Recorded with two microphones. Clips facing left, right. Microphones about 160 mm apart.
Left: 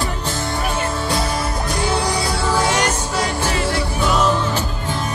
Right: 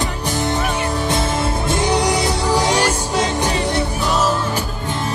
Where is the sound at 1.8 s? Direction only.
20° right (ahead or behind).